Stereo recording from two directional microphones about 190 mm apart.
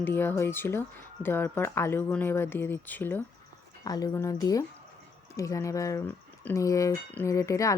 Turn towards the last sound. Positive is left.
turn(degrees=15)  # may be behind; listen again after turning